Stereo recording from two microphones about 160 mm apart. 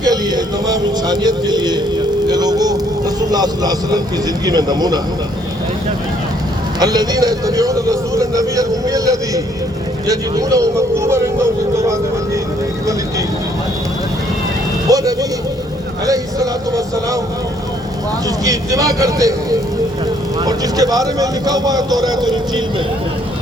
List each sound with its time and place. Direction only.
0.0 s a man's voice: 25° right (ahead or behind)
2.2 s vehicle: 25° right (ahead or behind)
4.4 s a man's voice: 25° right (ahead or behind)
6.7 s a man's voice: 25° right (ahead or behind)
12.8 s vehicle: 20° right (ahead or behind)
14.8 s a man's voice: 20° right (ahead or behind)
18.3 s a man's voice: 20° right (ahead or behind)